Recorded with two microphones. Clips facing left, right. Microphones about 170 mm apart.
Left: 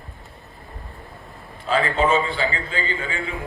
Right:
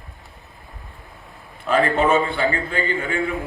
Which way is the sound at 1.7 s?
55° right (ahead or behind).